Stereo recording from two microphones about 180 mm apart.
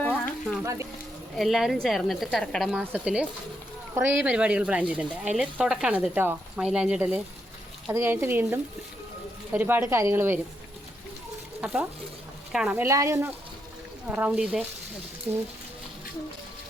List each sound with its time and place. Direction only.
0.6 s speech: 15° right (ahead or behind)
1.4 s speech: centre (ahead or behind)
11.6 s speech: 5° right (ahead or behind)